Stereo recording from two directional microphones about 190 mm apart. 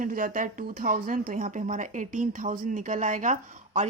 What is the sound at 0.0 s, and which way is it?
Speech, 45° right (ahead or behind).